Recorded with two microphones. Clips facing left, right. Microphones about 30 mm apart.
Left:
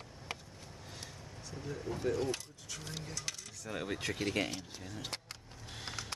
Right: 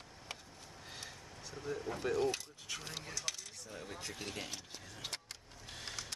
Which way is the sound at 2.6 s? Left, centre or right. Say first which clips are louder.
Right 1 dB; centre.